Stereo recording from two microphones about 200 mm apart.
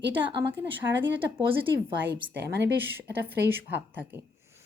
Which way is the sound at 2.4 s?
55° right (ahead or behind).